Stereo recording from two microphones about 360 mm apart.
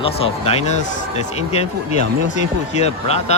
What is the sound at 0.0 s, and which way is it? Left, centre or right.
Speech, centre.